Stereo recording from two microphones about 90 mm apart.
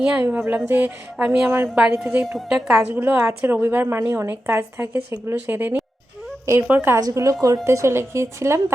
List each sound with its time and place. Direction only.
0.2 s a woman's voice: 20° right (ahead or behind)
2.5 s a woman's voice: 5° right (ahead or behind)
2.9 s a woman's voice: 20° right (ahead or behind)
6.4 s speech: 35° right (ahead or behind)
6.7 s a woman's voice: 20° right (ahead or behind)
6.9 s speech: 40° right (ahead or behind)